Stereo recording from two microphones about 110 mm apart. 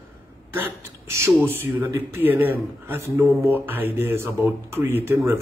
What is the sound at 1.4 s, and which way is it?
Speech, 20° right (ahead or behind).